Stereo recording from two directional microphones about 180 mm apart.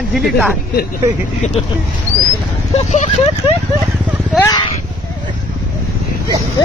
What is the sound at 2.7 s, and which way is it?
Speech, 40° left (ahead or behind).